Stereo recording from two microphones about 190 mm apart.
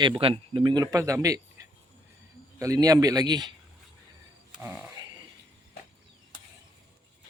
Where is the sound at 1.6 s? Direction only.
15° right (ahead or behind).